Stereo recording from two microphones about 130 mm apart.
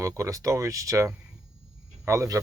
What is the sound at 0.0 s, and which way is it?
Speech, 25° right (ahead or behind).